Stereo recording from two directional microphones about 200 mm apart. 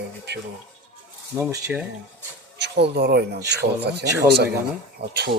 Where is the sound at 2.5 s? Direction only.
60° right (ahead or behind).